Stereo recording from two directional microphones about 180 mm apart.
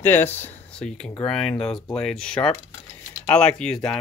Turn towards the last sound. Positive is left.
turn(degrees=5)  # may be behind; listen again after turning